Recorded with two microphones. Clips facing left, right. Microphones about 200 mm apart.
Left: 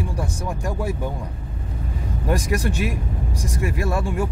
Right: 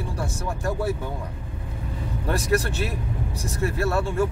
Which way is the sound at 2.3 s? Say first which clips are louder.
Left 1 dB; 15° left (ahead or behind).